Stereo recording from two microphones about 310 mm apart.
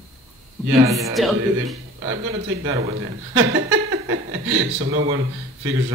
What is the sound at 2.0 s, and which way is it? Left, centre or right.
Speech, right.